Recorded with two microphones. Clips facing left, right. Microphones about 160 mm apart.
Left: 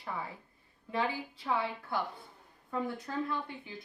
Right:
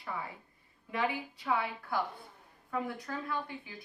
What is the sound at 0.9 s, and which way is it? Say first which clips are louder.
Speech: even; 30° left (ahead or behind).